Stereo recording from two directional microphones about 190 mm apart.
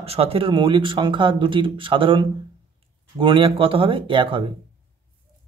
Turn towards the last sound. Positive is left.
turn(degrees=-25)  # may be behind; listen again after turning